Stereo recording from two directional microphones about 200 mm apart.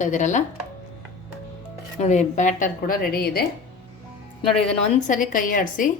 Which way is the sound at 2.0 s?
35° left (ahead or behind).